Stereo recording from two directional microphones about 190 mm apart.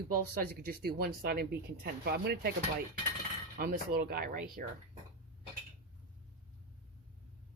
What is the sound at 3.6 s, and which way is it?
Speech, 55° right (ahead or behind).